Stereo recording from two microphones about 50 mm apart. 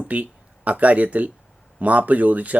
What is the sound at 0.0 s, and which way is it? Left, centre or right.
Speech, right.